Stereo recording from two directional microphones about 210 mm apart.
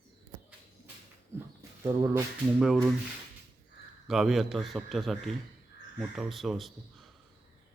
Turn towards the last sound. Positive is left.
turn(degrees=0)  # may be behind; listen again after turning